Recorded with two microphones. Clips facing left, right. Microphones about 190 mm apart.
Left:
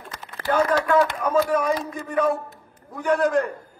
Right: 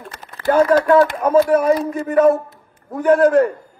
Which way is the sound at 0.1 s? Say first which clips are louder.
Right 7 dB; 50° right (ahead or behind).